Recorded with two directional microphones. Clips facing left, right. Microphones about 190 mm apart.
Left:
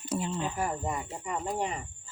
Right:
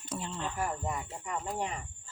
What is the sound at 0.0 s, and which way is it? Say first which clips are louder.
Speech: left 5 dB; 5° left (ahead or behind).